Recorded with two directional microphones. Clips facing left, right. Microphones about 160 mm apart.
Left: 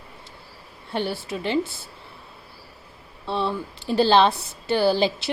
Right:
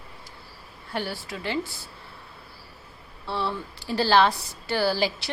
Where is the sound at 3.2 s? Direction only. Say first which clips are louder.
Left 4 dB; 20° left (ahead or behind).